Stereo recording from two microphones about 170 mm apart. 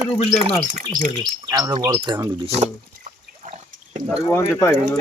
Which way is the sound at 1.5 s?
20° right (ahead or behind).